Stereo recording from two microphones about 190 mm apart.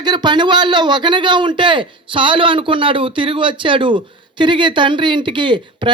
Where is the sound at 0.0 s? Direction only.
20° right (ahead or behind).